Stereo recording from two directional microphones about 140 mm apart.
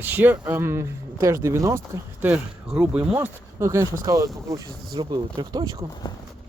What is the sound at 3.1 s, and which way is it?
Speech, 20° right (ahead or behind).